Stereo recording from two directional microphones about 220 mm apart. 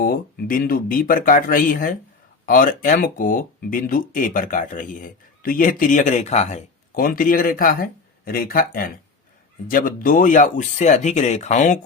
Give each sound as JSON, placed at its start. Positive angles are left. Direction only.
{"t": 0.0, "sound": "speech", "side_deg": 40}